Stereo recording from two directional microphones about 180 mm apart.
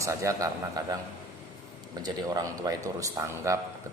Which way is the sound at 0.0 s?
15° right (ahead or behind).